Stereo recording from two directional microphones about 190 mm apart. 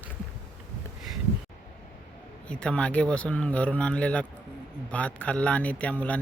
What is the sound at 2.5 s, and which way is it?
Speech, 5° left (ahead or behind).